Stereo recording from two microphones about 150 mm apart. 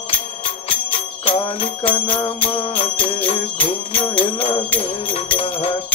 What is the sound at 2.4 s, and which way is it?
Music, 40° left (ahead or behind).